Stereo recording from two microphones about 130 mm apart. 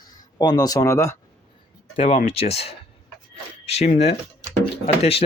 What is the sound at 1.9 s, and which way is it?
Speech, 50° left (ahead or behind).